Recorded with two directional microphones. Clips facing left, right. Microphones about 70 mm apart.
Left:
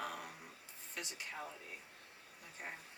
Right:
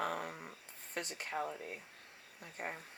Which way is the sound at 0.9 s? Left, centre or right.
Right.